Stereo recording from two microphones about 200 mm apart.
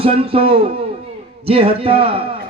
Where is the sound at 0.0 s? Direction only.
30° right (ahead or behind).